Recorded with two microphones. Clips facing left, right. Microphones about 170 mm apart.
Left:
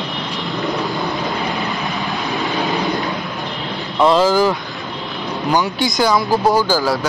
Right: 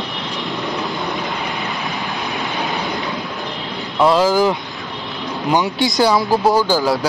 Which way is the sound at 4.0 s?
10° right (ahead or behind).